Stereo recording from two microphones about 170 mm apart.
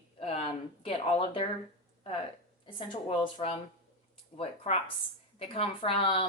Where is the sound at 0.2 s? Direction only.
35° left (ahead or behind).